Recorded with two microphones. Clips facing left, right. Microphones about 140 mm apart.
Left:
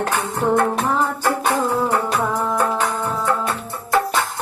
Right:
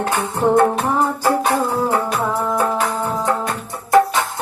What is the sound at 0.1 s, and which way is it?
Music, 15° right (ahead or behind).